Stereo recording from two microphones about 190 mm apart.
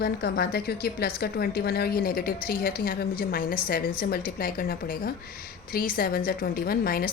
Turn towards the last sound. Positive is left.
turn(degrees=50)  # may be behind; listen again after turning